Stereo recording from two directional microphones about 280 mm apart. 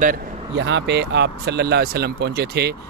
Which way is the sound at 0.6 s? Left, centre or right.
Right.